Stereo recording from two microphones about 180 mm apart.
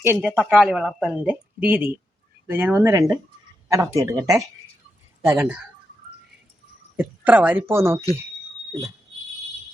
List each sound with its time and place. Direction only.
0.0 s speech: 10° right (ahead or behind)
6.9 s speech: 10° right (ahead or behind)